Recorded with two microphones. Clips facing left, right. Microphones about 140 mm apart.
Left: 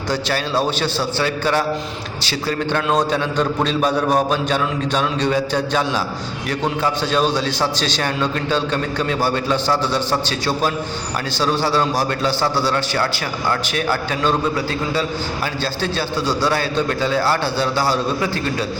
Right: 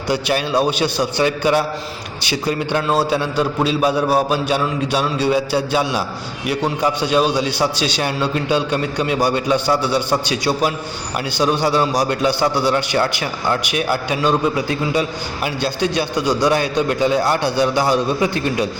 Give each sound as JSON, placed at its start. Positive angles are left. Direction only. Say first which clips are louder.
{"t": 0.1, "sound": "a man's voice", "louder": "right 3 dB", "side_deg": -15}